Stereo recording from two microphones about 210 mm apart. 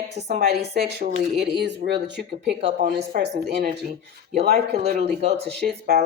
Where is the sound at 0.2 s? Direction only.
50° right (ahead or behind).